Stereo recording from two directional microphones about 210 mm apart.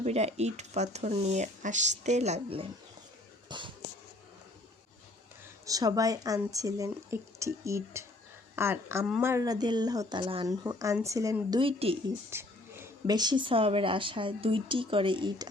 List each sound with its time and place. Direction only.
0.0 s speech: 30° right (ahead or behind)
5.6 s speech: 15° right (ahead or behind)
9.3 s speech: 15° right (ahead or behind)
12.3 s speech: 10° right (ahead or behind)